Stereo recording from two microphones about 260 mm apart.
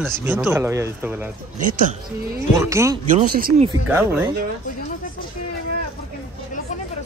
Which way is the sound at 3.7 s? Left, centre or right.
Centre.